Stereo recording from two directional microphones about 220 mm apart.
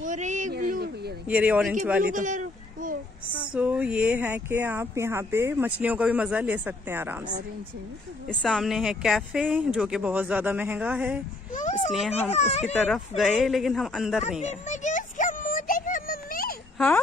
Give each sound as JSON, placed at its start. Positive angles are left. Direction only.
{"t": 0.0, "sound": "a sound", "side_deg": -35}
{"t": 1.2, "sound": "speech", "side_deg": -5}
{"t": 2.0, "sound": "a sound", "side_deg": -35}
{"t": 3.5, "sound": "speech", "side_deg": -5}
{"t": 8.3, "sound": "speech", "side_deg": 5}
{"t": 11.5, "sound": "a child's voice", "side_deg": 35}
{"t": 12.8, "sound": "speech", "side_deg": 0}
{"t": 14.4, "sound": "music", "side_deg": 35}
{"t": 16.7, "sound": "speech", "side_deg": 5}